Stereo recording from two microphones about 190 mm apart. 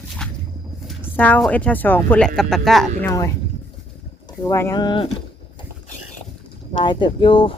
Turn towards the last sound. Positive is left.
turn(degrees=25)  # may be behind; listen again after turning